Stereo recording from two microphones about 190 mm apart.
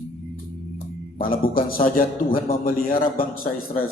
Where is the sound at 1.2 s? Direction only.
50° left (ahead or behind).